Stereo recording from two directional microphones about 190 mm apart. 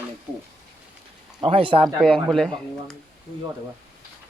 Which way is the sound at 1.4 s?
30° right (ahead or behind).